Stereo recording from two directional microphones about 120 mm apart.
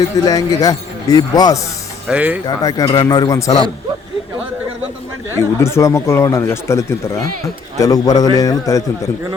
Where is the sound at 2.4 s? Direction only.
30° left (ahead or behind).